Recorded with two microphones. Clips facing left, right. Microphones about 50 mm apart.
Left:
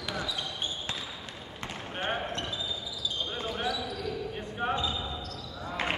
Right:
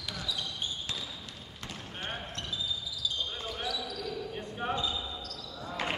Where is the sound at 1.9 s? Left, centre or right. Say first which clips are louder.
Left 8 dB; left.